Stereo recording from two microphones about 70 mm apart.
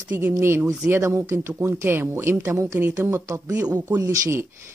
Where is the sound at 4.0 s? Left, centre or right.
Right.